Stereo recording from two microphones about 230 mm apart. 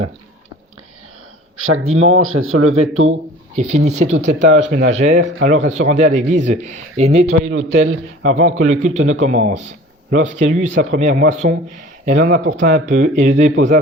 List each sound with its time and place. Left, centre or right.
1.6 s speech: right
3.1 s speech: right
4.4 s speech: right
4.8 s speech: right
7.5 s speech: right
8.2 s speech: right
12.4 s speech: right
12.6 s speech: right